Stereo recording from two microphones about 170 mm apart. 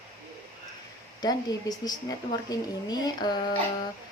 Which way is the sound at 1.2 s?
25° left (ahead or behind).